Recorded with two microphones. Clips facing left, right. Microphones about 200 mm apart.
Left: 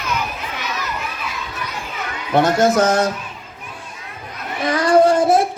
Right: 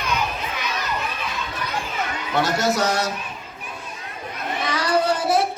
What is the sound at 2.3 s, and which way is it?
Speech, 55° left (ahead or behind).